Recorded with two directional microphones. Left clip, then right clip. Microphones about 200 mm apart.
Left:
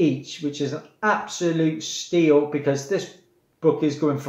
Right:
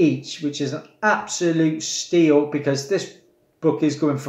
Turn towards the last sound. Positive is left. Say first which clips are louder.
# right 2 dB
turn(degrees=0)  # may be behind; listen again after turning